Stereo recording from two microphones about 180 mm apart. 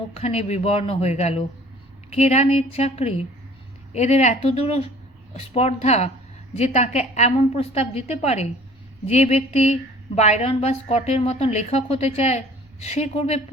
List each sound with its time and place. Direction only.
0.1 s a woman's voice: 35° left (ahead or behind)